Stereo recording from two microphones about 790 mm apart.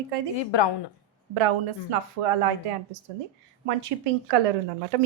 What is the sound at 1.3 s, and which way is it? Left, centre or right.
Speech, right.